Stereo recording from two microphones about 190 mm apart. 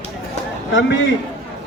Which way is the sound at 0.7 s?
70° left (ahead or behind).